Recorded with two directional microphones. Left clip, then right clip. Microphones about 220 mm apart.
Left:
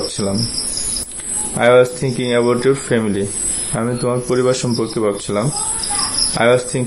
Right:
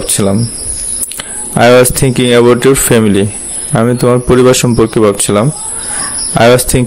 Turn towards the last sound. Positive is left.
turn(degrees=-40)  # may be behind; listen again after turning